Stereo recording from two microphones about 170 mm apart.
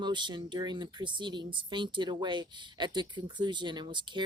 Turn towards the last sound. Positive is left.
turn(degrees=-25)  # may be behind; listen again after turning